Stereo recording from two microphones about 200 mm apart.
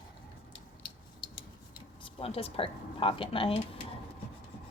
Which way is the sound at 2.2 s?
30° left (ahead or behind).